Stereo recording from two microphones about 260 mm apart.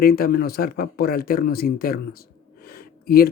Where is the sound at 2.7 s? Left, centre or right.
Left.